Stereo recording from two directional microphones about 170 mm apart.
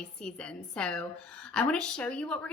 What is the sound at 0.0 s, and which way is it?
A woman's voice, 5° left (ahead or behind).